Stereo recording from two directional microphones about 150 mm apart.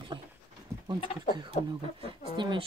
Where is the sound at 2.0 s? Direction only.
35° right (ahead or behind).